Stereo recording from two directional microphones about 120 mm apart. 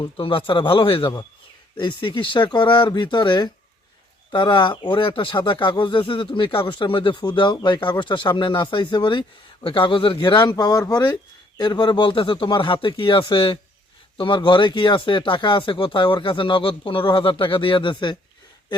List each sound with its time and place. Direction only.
0.0 s speech: 45° left (ahead or behind)